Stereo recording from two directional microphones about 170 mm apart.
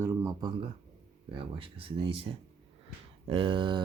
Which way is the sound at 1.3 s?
30° right (ahead or behind).